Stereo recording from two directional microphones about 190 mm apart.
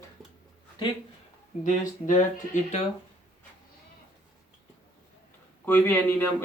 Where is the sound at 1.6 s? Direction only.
40° left (ahead or behind).